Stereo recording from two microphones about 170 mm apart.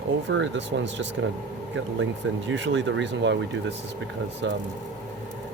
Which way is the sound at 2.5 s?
90° right.